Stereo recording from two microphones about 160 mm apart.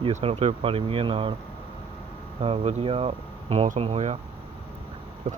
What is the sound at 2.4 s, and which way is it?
Speech, 40° right (ahead or behind).